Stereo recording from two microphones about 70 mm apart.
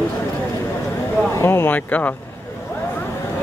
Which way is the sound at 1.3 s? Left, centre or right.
Left.